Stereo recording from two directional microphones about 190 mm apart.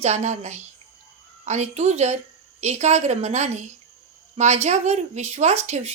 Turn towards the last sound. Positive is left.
turn(degrees=-35)  # may be behind; listen again after turning